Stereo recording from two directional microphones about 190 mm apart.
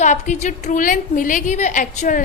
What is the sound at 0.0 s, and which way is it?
A woman's voice, 40° left (ahead or behind).